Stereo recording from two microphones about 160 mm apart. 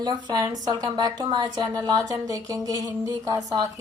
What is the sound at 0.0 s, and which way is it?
A woman's voice, 25° right (ahead or behind).